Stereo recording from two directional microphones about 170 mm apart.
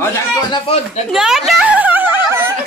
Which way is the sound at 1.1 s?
Centre (ahead or behind).